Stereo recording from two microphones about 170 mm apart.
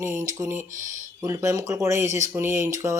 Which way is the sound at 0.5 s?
50° right (ahead or behind).